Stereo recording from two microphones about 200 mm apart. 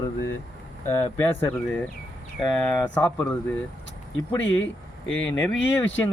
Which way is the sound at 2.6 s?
10° left (ahead or behind).